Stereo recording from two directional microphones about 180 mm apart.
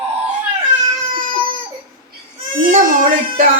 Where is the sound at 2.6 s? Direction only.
50° right (ahead or behind).